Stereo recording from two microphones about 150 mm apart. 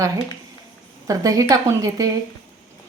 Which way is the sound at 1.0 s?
25° right (ahead or behind).